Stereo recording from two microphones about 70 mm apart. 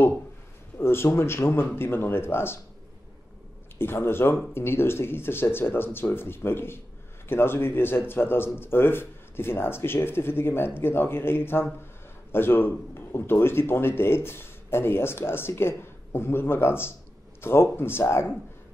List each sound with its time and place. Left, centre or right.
0.7 s a man's voice: left
3.7 s a man's voice: left